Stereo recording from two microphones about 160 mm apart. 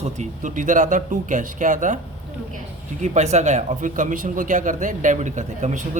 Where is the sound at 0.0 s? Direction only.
50° right (ahead or behind).